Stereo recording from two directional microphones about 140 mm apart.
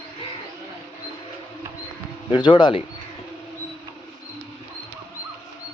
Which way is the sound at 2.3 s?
35° left (ahead or behind).